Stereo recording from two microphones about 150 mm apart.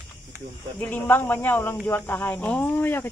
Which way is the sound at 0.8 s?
10° left (ahead or behind).